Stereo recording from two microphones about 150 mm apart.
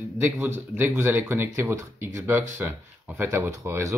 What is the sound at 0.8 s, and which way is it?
Speech, 15° right (ahead or behind).